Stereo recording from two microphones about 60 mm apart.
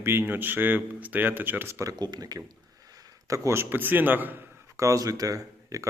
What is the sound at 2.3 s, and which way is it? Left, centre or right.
Speech, right.